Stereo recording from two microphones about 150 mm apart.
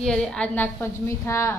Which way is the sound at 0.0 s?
5° left (ahead or behind).